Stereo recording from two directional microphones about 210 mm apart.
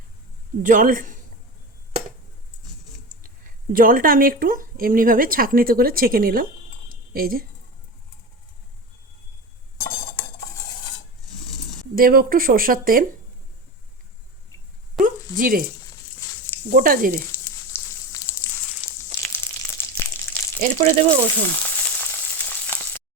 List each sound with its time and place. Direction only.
0.6 s a man's voice: 40° right (ahead or behind)
3.7 s speech: 45° right (ahead or behind)
11.9 s speech: 45° right (ahead or behind)
14.9 s a sound: 40° right (ahead or behind)
16.6 s a man's voice: 40° right (ahead or behind)
17.3 s a sound: 10° left (ahead or behind)
19.2 s crushing: 10° left (ahead or behind)
20.6 s a man's voice: 35° right (ahead or behind)
21.4 s frying: 10° left (ahead or behind)